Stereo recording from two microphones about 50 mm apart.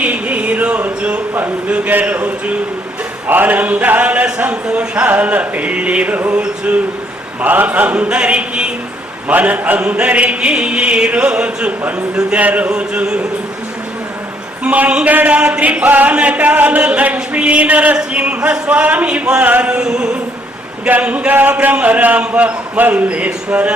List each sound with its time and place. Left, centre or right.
0.0 s a sound: right
1.4 s speech: right
3.2 s a man's voice: right
4.6 s speech: centre
5.0 s speech: right
7.4 s a man's voice: right; by 11.7 s centre
12.4 s a man's voice: right
12.7 s speech: centre
14.6 s speech: right
15.4 s speech: centre
15.6 s a man's voice: right
19.7 s a sound: centre
20.8 s a man's voice: right